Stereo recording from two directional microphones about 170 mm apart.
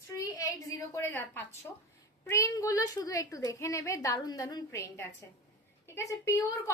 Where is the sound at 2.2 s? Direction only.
20° left (ahead or behind).